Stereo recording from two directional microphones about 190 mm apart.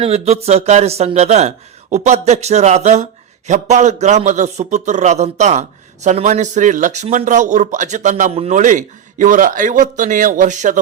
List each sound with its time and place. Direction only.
0.0 s speech: 35° right (ahead or behind)